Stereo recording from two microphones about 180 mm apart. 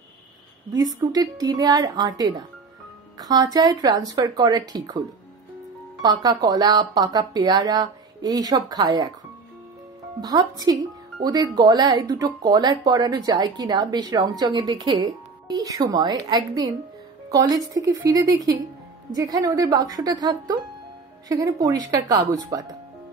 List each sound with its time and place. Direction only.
0.7 s speech: 20° right (ahead or behind)
6.0 s speech: 20° right (ahead or behind)
10.2 s speech: 20° right (ahead or behind)